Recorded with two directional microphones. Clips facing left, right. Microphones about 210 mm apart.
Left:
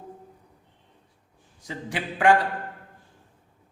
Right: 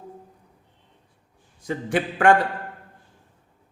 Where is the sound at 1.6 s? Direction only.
55° right (ahead or behind).